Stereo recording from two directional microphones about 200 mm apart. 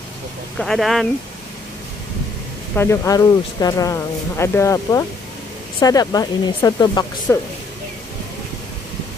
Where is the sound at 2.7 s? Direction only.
10° left (ahead or behind).